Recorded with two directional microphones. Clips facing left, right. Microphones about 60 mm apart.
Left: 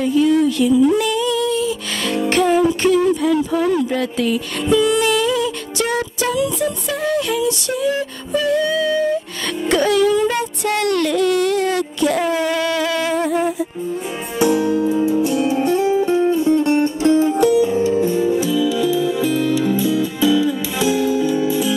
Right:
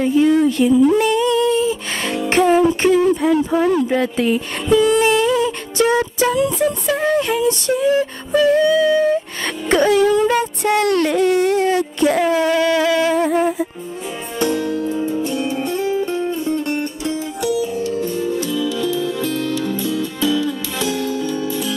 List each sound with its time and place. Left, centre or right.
0.0 s music: right
2.2 s speech: right
9.7 s music: right
10.6 s a sound: right
14.4 s music: centre
15.4 s music: centre
17.0 s music: left; by 21.7 s centre